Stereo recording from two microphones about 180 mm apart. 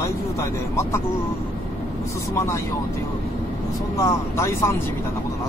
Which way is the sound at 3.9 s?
15° left (ahead or behind).